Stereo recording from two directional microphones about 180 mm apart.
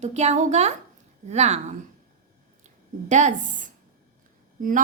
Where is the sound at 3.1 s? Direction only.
40° right (ahead or behind).